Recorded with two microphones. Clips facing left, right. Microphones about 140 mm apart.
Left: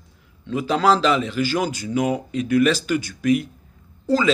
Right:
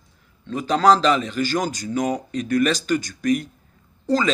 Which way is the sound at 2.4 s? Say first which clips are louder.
Left 2 dB; 40° right (ahead or behind).